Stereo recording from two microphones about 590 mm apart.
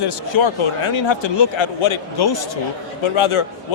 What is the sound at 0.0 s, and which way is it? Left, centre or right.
Speech, left.